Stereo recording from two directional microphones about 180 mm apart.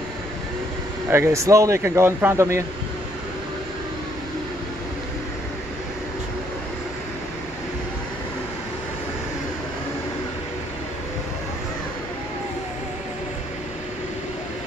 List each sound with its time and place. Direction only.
1.1 s speech: 15° right (ahead or behind)